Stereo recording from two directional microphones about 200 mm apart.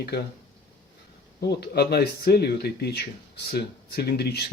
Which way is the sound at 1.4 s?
55° left (ahead or behind).